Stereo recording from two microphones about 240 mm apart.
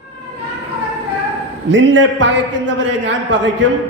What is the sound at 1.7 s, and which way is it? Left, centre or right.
Speech, right.